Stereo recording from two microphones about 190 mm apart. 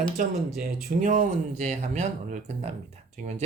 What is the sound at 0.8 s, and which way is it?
Speech, 40° right (ahead or behind).